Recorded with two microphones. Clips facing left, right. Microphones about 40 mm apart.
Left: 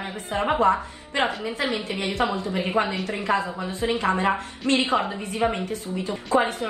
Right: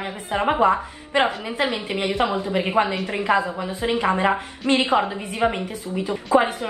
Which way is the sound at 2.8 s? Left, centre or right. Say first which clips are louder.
Right 3 dB; right.